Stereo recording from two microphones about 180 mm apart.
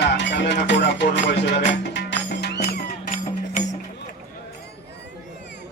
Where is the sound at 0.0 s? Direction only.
75° left (ahead or behind).